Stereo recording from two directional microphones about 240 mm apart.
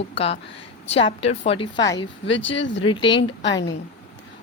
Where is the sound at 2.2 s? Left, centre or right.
Left.